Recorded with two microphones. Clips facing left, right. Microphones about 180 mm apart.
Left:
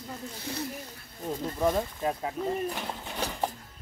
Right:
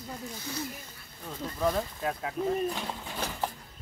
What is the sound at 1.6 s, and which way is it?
Speech, 15° left (ahead or behind).